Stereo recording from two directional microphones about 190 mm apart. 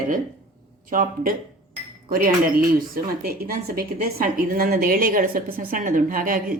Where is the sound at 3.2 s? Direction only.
50° right (ahead or behind).